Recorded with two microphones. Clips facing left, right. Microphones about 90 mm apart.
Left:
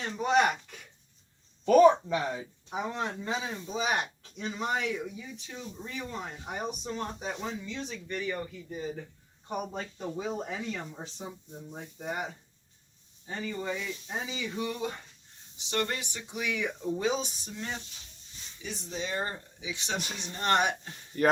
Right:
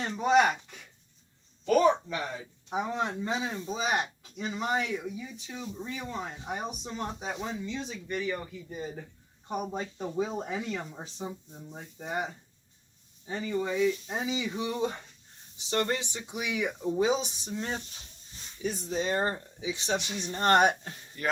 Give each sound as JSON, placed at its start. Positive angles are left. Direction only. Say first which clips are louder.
{"t": 0.3, "sound": "speech", "louder": "right 2 dB", "side_deg": 0}
{"t": 2.7, "sound": "speech", "louder": "right 3 dB", "side_deg": -15}
{"t": 7.6, "sound": "speech", "louder": "right 2 dB", "side_deg": -15}
{"t": 11.5, "sound": "speech", "louder": "left 2 dB", "side_deg": 15}
{"t": 11.9, "sound": "speech", "louder": "right 2 dB", "side_deg": 0}
{"t": 13.2, "sound": "speech", "louder": "right 3 dB", "side_deg": -15}
{"t": 18.6, "sound": "speech", "louder": "right 6 dB", "side_deg": -45}
{"t": 20.2, "sound": "speech", "louder": "right 4 dB", "side_deg": -45}
{"t": 21.1, "sound": "speech", "louder": "left 7 dB", "side_deg": 45}